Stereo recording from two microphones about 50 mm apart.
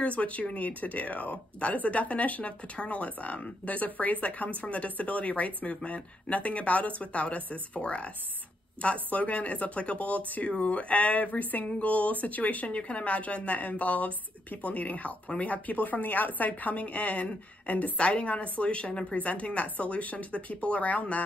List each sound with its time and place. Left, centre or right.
0.0 s speech: left